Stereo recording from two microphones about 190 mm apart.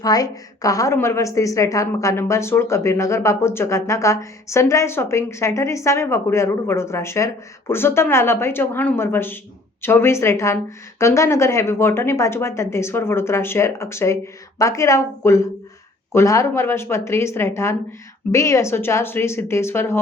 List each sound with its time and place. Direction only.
0.0 s a woman's voice: 20° left (ahead or behind)